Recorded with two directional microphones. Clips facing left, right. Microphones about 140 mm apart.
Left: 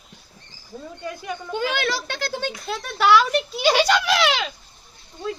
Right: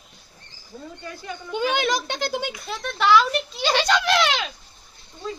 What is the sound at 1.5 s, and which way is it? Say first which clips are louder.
A child's voice: right 2 dB; 20° right (ahead or behind).